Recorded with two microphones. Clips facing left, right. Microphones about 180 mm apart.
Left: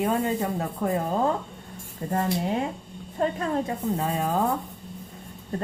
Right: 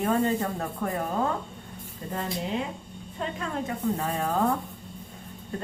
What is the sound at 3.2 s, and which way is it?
Speech, 40° left (ahead or behind).